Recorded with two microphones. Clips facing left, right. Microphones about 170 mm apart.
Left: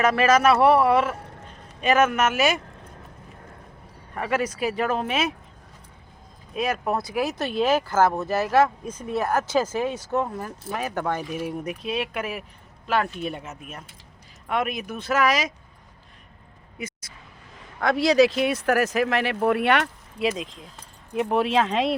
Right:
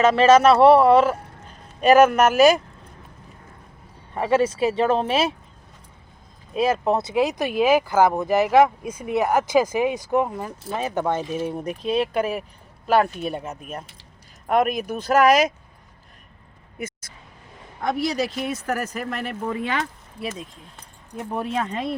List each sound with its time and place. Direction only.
0.0 s speech: 25° right (ahead or behind)
4.1 s speech: 30° right (ahead or behind)
6.6 s speech: 25° right (ahead or behind); by 15.4 s 50° right (ahead or behind)
16.7 s a sound: 50° right (ahead or behind)
17.7 s speech: 90° left